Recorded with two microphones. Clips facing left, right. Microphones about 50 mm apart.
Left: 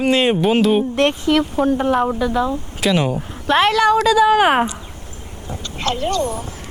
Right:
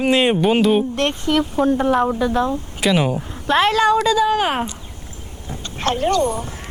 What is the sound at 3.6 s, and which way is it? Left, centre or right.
Speech, left.